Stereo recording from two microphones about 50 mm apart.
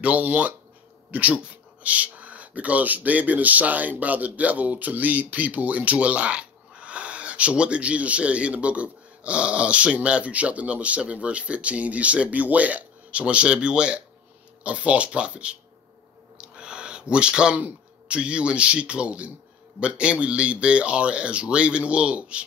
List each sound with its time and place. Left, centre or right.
0.0 s speech: right
16.3 s a sound: centre
18.0 s speech: right